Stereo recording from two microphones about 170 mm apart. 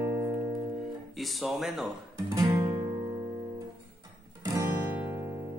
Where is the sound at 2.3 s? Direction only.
20° right (ahead or behind).